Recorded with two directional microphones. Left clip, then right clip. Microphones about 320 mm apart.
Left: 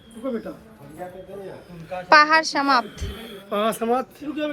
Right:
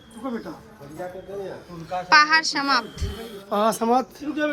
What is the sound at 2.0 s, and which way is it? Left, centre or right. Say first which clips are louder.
A woman's voice: left 2 dB; centre.